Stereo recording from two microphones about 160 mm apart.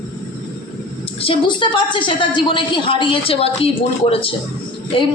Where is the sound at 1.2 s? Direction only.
30° left (ahead or behind).